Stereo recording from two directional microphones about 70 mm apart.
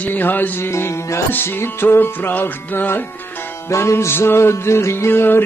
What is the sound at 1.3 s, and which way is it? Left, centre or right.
Music, left.